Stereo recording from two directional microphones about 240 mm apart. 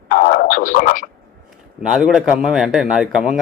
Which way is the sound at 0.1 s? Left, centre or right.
Left.